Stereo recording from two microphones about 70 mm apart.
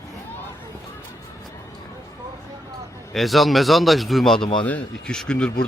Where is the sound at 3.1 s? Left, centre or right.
Centre.